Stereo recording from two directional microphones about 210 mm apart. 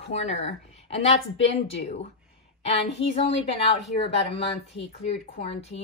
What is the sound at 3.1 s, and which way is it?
A woman's voice, 30° left (ahead or behind).